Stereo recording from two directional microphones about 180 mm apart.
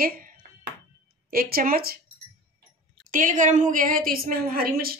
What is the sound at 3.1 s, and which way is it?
Speech, 45° right (ahead or behind).